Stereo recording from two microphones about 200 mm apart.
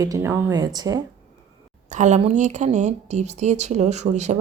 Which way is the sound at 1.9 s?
35° right (ahead or behind).